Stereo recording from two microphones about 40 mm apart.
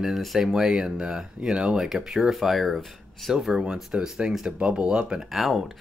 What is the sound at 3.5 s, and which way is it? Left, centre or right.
Speech, centre.